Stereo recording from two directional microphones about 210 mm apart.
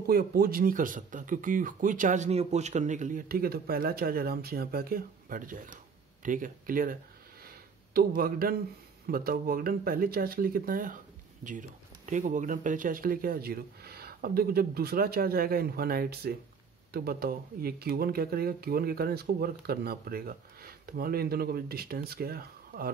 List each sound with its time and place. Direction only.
0.0 s speech: 45° right (ahead or behind)
7.4 s a sound: 45° right (ahead or behind)
9.0 s speech: 45° right (ahead or behind)